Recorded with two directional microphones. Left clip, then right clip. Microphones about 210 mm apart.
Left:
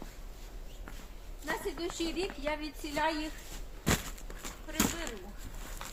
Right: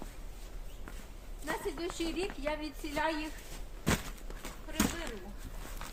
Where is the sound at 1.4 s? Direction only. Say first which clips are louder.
Left 1 dB; 5° right (ahead or behind).